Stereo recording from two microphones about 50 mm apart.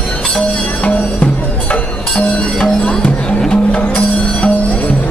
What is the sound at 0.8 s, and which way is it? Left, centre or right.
Music, left.